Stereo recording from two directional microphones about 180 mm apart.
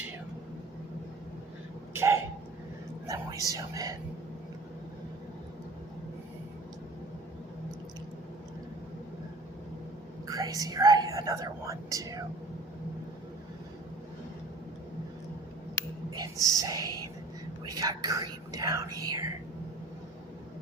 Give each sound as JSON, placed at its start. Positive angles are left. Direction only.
{"t": 1.9, "sound": "a sound", "side_deg": -15}
{"t": 3.1, "sound": "whispering", "side_deg": -20}
{"t": 3.5, "sound": "speech", "side_deg": -20}
{"t": 10.2, "sound": "speech", "side_deg": -20}
{"t": 16.1, "sound": "speech", "side_deg": -20}
{"t": 17.7, "sound": "speech", "side_deg": -20}